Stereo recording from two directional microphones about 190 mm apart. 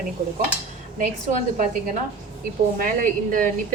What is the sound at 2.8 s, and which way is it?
Speech, 45° right (ahead or behind).